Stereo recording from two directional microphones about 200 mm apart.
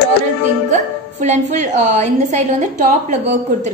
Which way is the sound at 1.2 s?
35° right (ahead or behind).